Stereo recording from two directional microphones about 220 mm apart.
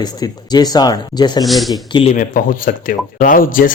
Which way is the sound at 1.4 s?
Centre (ahead or behind).